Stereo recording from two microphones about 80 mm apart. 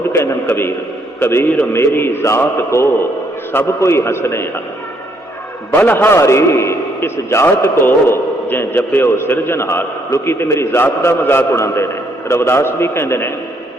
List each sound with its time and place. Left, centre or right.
0.1 s a sound: left
1.2 s a man's voice: left
5.8 s a man's voice: centre
6.1 s a man's voice: left